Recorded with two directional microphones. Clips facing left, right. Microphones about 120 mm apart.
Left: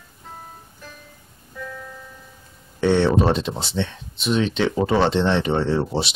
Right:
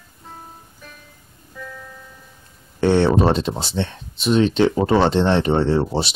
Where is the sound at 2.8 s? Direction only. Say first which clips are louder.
Right 2 dB; 35° right (ahead or behind).